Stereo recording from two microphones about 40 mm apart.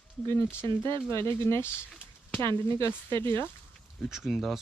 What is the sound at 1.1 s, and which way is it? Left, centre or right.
Speech, left.